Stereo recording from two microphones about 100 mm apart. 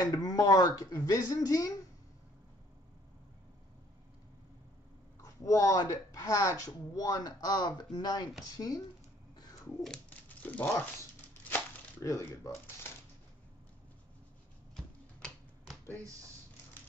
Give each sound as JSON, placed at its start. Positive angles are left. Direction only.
{"t": 0.0, "sound": "speech", "side_deg": 40}
{"t": 5.2, "sound": "speech", "side_deg": 35}
{"t": 9.8, "sound": "a sound", "side_deg": 15}
{"t": 12.0, "sound": "speech", "side_deg": 30}
{"t": 15.1, "sound": "finger snapping", "side_deg": 10}